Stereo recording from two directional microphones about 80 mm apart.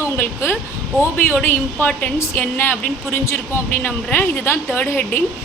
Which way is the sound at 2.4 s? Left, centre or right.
Left.